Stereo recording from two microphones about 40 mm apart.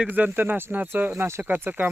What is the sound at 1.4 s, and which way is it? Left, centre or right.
Speech, right.